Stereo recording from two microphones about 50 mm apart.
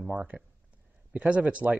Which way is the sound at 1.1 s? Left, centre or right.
Right.